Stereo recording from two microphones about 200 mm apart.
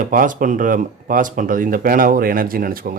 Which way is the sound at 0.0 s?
45° right (ahead or behind).